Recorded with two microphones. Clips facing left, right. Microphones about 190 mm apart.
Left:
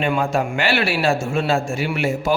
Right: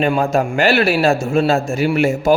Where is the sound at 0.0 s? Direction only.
40° right (ahead or behind).